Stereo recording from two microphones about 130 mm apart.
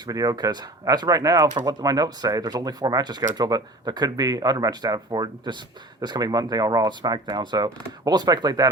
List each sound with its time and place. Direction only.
0.0 s speech: 30° right (ahead or behind)